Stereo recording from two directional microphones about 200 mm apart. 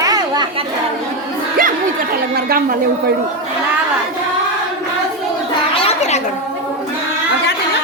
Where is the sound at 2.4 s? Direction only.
50° right (ahead or behind).